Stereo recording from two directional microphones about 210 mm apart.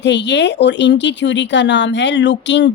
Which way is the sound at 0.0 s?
55° left (ahead or behind).